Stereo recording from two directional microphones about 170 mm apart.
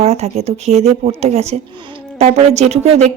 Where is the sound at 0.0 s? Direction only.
40° right (ahead or behind).